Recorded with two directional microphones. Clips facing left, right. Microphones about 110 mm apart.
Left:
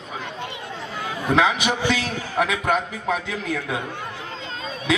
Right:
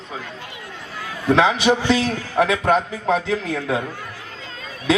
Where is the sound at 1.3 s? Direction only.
30° right (ahead or behind).